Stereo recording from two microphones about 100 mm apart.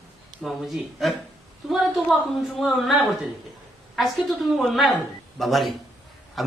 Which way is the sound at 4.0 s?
Centre (ahead or behind).